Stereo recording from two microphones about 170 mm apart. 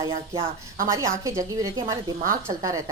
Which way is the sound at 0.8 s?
20° right (ahead or behind).